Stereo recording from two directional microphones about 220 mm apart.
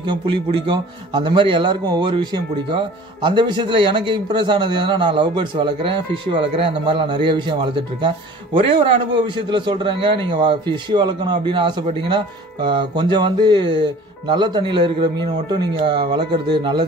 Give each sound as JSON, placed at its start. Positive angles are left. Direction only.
{"t": 0.1, "sound": "a man's voice", "side_deg": -20}
{"t": 8.5, "sound": "a man's voice", "side_deg": -25}